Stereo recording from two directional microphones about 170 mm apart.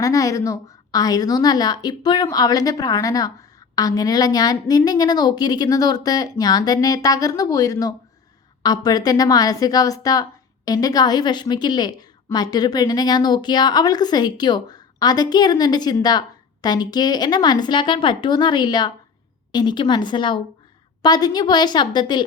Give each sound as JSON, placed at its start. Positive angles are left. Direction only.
{"t": 0.0, "sound": "a woman's voice", "side_deg": 20}